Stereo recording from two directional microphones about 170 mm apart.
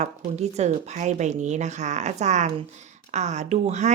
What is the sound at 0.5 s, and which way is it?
Speech, 40° right (ahead or behind).